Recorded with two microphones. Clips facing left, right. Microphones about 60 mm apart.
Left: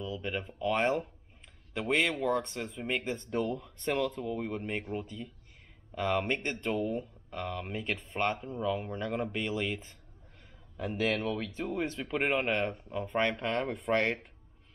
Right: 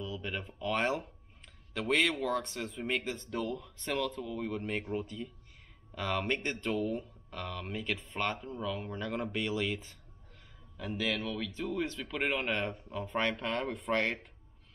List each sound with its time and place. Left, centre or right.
0.0 s speech: centre
3.3 s speech: left; by 5.3 s centre
5.9 s speech: centre
7.8 s speech: left; by 9.8 s centre
11.0 s speech: left
12.9 s speech: centre